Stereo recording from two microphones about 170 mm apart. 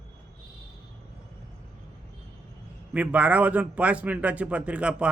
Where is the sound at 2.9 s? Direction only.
10° right (ahead or behind).